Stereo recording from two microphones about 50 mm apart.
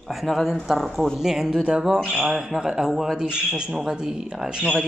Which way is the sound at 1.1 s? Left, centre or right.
Centre.